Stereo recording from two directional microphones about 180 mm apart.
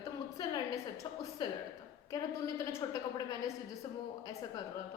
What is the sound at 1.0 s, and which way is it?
Speech, 25° left (ahead or behind).